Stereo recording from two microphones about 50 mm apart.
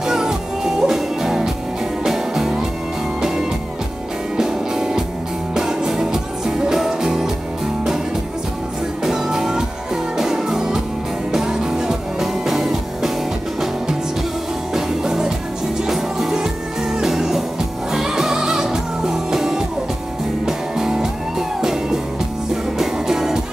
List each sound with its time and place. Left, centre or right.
0.0 s music: centre
9.0 s music: centre
14.7 s music: centre